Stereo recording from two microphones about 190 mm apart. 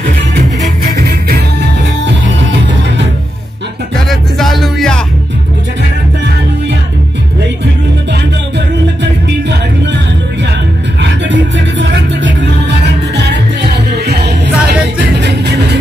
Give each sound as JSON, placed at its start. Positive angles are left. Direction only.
{"t": 0.9, "sound": "music", "side_deg": -55}
{"t": 4.1, "sound": "music", "side_deg": 0}
{"t": 9.0, "sound": "music", "side_deg": -65}
{"t": 11.0, "sound": "music", "side_deg": -70}